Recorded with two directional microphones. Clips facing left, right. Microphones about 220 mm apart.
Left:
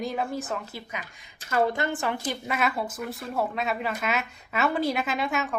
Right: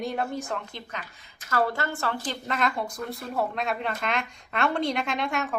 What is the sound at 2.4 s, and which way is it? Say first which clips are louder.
Speech: right 1 dB; 5° left (ahead or behind).